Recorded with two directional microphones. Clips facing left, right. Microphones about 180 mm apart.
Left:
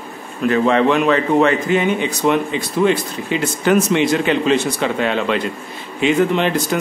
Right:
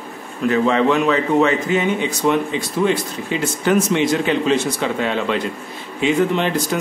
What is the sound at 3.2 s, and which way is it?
A man's voice, 75° left (ahead or behind).